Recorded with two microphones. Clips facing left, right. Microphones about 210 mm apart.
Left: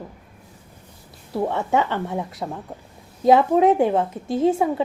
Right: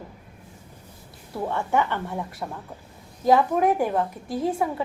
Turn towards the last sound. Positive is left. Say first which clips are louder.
# left 6 dB
turn(degrees=25)  # may be behind; listen again after turning